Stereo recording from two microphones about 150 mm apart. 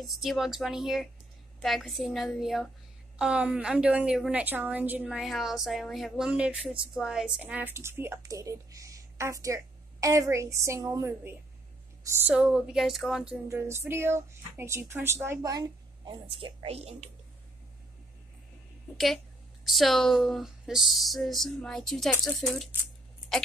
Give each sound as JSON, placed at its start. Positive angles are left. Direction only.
{"t": 0.0, "sound": "a woman's voice", "side_deg": 0}
{"t": 13.5, "sound": "a woman's voice", "side_deg": -15}
{"t": 16.1, "sound": "speech", "side_deg": -35}
{"t": 19.6, "sound": "speech", "side_deg": 0}